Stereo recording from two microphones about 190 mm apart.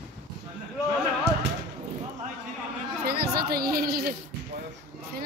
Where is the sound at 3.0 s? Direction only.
55° right (ahead or behind).